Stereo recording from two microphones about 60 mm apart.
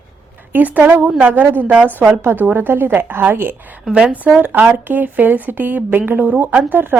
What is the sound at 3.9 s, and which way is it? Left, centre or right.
Speech, centre.